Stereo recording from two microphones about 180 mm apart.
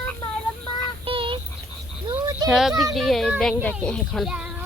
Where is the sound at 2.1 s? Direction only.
20° right (ahead or behind).